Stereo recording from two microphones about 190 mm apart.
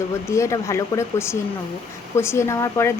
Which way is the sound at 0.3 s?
15° left (ahead or behind).